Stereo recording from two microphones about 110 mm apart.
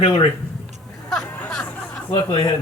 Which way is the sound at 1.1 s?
5° left (ahead or behind).